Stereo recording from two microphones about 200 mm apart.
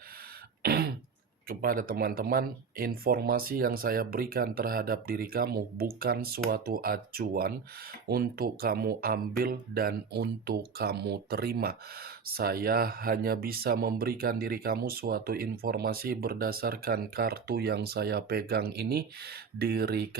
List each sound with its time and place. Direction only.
0.6 s throat clearing: 50° right (ahead or behind)
1.5 s speech: 45° right (ahead or behind)